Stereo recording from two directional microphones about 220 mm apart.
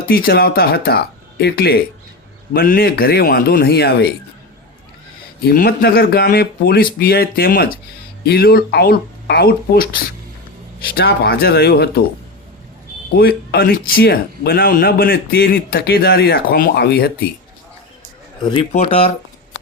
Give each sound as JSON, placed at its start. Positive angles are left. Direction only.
{"t": 0.1, "sound": "speech", "side_deg": 45}
{"t": 5.4, "sound": "speech", "side_deg": 45}
{"t": 13.1, "sound": "speech", "side_deg": 45}
{"t": 18.4, "sound": "speech", "side_deg": 25}